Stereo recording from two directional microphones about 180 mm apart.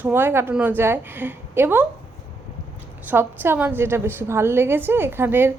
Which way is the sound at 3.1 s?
10° right (ahead or behind).